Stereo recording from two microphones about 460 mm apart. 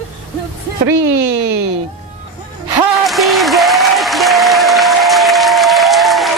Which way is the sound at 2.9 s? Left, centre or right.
Centre.